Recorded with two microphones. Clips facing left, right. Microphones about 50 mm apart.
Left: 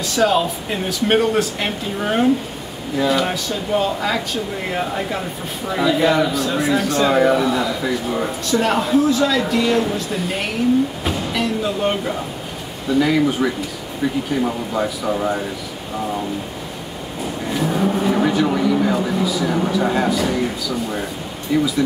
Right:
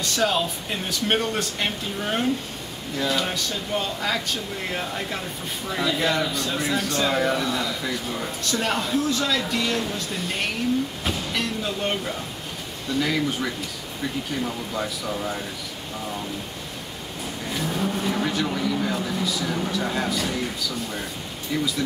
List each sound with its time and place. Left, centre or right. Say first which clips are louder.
0.0 s speech: left 6 dB; centre
14.4 s speech: left 7 dB; centre
17.5 s vehicle: left 7 dB; centre
18.0 s speech: left 8 dB; centre